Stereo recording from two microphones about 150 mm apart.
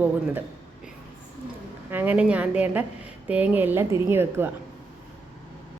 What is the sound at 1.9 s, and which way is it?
A woman's voice, 10° right (ahead or behind).